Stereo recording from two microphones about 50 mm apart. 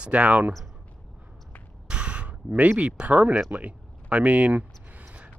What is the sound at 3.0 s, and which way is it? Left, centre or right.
Speech, right.